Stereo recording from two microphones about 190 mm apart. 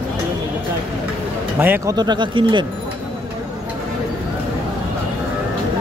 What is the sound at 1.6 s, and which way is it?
Speech, 10° right (ahead or behind).